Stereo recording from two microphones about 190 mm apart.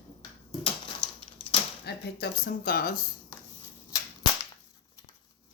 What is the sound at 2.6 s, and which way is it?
Speech, 50° left (ahead or behind).